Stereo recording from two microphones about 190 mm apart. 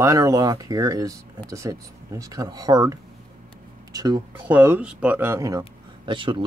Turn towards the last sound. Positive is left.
turn(degrees=-25)  # may be behind; listen again after turning